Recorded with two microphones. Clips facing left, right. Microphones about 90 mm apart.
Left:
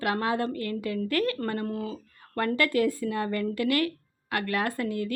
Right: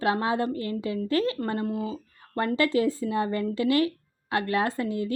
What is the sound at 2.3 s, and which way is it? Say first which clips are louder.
Speech: right 1 dB; 25° right (ahead or behind).